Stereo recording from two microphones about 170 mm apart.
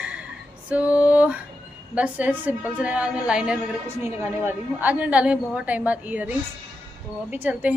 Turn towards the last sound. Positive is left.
turn(degrees=-10)  # may be behind; listen again after turning